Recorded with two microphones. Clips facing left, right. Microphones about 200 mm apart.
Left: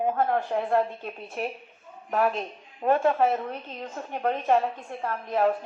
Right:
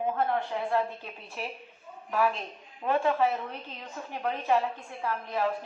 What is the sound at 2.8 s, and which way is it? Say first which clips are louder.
A woman's voice: left 4 dB; 50° left (ahead or behind).